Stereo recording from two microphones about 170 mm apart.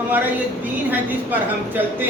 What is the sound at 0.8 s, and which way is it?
A woman's voice, 10° right (ahead or behind).